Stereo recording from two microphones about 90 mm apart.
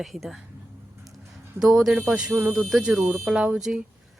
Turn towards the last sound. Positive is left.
turn(degrees=-5)  # may be behind; listen again after turning